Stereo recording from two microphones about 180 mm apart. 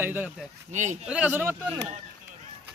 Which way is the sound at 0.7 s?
40° right (ahead or behind).